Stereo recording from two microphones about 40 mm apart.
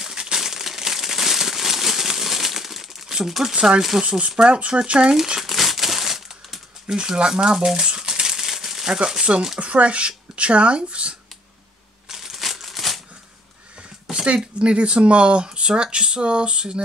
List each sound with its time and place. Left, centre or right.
0.0 s crumpling: centre
3.3 s speech: centre
3.5 s speech: right
5.4 s crumpling: centre
7.0 s speech: centre
12.1 s crumpling: centre
14.1 s speech: right